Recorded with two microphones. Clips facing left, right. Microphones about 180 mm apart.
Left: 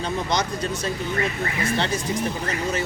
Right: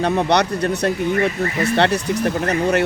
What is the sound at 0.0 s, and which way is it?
Speech, 65° right (ahead or behind).